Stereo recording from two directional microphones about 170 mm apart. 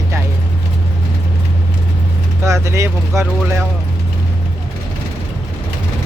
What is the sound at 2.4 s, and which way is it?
Speech, 15° right (ahead or behind).